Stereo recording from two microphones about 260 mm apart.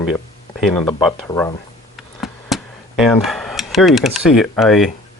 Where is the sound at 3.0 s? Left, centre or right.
Centre.